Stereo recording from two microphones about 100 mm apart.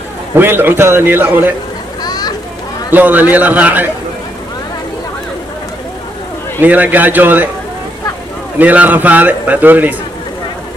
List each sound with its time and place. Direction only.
0.3 s a man's voice: 20° right (ahead or behind)
2.0 s a sound: 40° left (ahead or behind)
2.9 s a man's voice: 15° right (ahead or behind)
6.6 s a man's voice: 15° right (ahead or behind)
8.5 s a man's voice: 15° right (ahead or behind)